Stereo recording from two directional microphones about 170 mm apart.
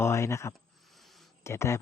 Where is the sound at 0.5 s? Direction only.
Centre (ahead or behind).